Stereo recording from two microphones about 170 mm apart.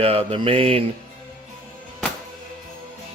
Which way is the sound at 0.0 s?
35° right (ahead or behind).